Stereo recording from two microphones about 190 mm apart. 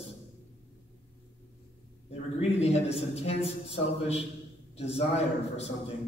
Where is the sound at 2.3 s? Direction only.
35° left (ahead or behind).